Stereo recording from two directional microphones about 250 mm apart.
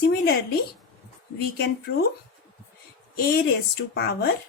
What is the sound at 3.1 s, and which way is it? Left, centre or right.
Speech, left.